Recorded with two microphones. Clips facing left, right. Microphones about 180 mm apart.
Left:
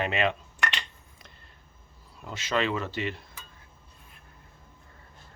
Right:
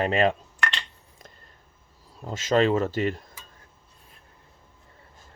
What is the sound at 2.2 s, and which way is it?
Speech, 40° right (ahead or behind).